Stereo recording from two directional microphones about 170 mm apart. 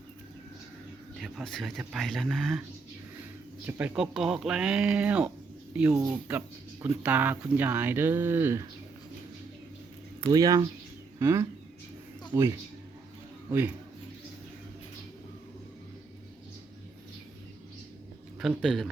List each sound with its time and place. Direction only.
1.2 s speech: centre (ahead or behind)
3.7 s speech: 10° right (ahead or behind)
10.2 s speech: 20° right (ahead or behind)
18.3 s speech: centre (ahead or behind)